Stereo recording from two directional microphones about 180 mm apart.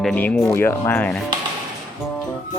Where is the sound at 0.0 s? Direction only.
5° left (ahead or behind).